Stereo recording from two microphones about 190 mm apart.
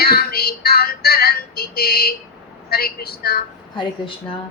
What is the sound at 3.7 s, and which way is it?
Speech, 25° left (ahead or behind).